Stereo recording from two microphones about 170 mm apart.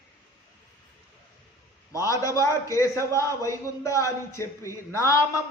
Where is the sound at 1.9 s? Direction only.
20° left (ahead or behind).